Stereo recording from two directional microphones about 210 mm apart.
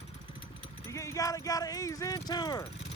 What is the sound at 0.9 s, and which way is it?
Speech, 15° left (ahead or behind).